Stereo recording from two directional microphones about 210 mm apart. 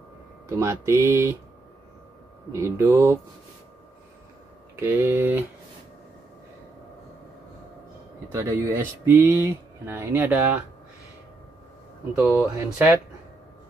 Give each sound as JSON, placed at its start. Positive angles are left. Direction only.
{"t": 0.5, "sound": "speech", "side_deg": -15}
{"t": 2.5, "sound": "speech", "side_deg": -15}
{"t": 4.7, "sound": "speech", "side_deg": -10}
{"t": 8.3, "sound": "speech", "side_deg": -15}
{"t": 12.3, "sound": "speech", "side_deg": -10}